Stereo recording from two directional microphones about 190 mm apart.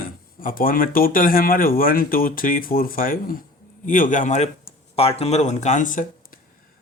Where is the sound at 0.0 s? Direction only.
50° left (ahead or behind).